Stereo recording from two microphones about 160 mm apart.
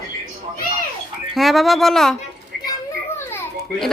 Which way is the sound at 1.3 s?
Centre (ahead or behind).